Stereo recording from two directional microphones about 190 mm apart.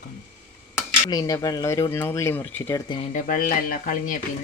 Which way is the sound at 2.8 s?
25° left (ahead or behind).